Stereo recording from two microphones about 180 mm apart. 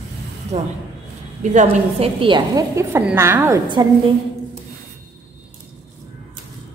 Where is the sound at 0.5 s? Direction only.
35° right (ahead or behind).